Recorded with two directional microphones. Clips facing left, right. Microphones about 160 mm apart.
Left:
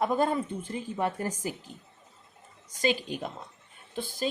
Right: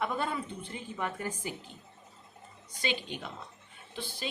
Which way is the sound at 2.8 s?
40° left (ahead or behind).